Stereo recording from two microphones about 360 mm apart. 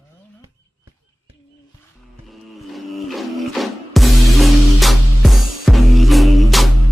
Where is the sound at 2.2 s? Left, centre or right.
Centre.